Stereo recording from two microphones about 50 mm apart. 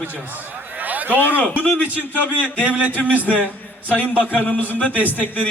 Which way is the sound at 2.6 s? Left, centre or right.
Right.